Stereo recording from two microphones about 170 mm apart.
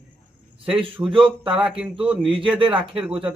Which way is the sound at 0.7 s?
30° right (ahead or behind).